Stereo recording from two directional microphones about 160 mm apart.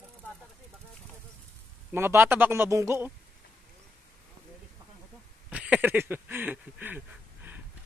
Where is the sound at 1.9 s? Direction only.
15° right (ahead or behind).